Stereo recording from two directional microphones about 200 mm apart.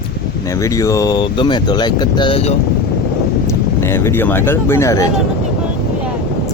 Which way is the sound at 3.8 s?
15° left (ahead or behind).